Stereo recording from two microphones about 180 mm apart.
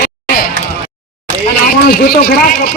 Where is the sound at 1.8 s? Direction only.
55° left (ahead or behind).